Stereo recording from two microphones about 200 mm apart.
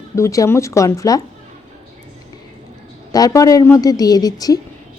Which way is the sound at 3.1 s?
20° left (ahead or behind).